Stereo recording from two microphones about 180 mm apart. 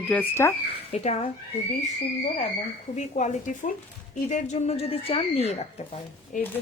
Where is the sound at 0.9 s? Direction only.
40° left (ahead or behind).